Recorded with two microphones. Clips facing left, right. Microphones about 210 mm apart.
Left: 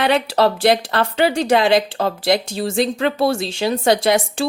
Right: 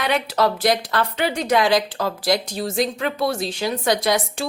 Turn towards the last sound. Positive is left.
turn(degrees=30)  # may be behind; listen again after turning